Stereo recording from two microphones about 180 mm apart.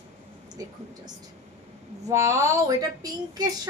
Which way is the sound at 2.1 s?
15° right (ahead or behind).